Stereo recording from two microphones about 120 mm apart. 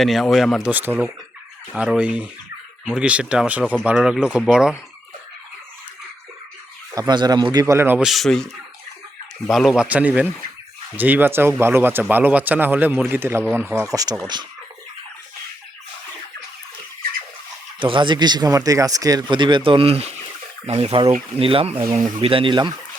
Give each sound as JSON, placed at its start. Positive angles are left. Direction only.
{"t": 0.0, "sound": "speech", "side_deg": 0}
{"t": 0.6, "sound": "speech", "side_deg": -15}
{"t": 6.9, "sound": "speech", "side_deg": -40}
{"t": 7.9, "sound": "speech", "side_deg": 0}
{"t": 9.5, "sound": "speech", "side_deg": 0}
{"t": 13.9, "sound": "speech", "side_deg": -30}
{"t": 17.7, "sound": "speech", "side_deg": -45}
{"t": 21.9, "sound": "speech", "side_deg": -75}
{"t": 22.3, "sound": "speech", "side_deg": -45}